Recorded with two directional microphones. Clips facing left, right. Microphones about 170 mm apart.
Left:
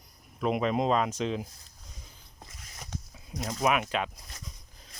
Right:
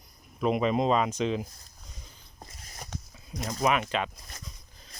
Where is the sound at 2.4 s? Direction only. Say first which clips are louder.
Right 3 dB; 40° right (ahead or behind).